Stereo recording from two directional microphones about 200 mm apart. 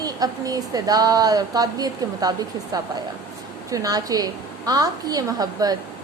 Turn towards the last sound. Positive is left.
turn(degrees=-20)  # may be behind; listen again after turning